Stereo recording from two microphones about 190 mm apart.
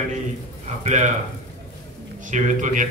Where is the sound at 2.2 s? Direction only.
40° right (ahead or behind).